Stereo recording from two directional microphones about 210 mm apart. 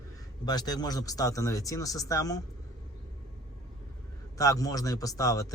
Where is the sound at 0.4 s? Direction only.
20° left (ahead or behind).